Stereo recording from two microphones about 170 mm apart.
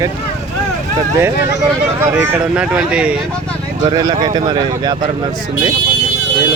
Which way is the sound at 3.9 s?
25° right (ahead or behind).